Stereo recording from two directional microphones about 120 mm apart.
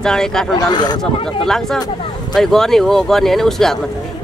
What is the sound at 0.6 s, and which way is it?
Speech, 35° left (ahead or behind).